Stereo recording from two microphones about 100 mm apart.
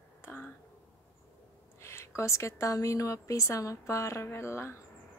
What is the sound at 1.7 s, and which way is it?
A woman's voice, 30° left (ahead or behind).